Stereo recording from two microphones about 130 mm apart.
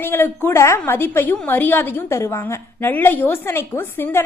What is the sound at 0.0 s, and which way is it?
A woman's voice, 15° left (ahead or behind).